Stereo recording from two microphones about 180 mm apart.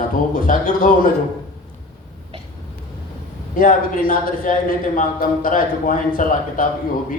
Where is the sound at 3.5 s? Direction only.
50° left (ahead or behind).